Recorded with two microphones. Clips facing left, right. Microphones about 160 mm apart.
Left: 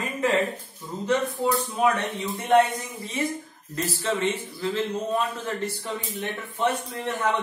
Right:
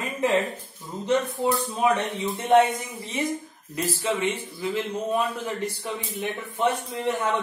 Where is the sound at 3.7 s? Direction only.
15° right (ahead or behind).